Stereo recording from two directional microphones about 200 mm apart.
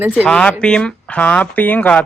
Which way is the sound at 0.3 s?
5° left (ahead or behind).